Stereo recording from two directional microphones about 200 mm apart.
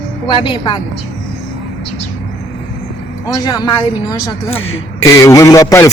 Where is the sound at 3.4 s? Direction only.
20° left (ahead or behind).